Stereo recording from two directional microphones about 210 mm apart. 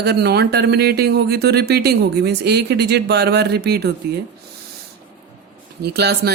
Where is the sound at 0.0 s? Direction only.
50° right (ahead or behind).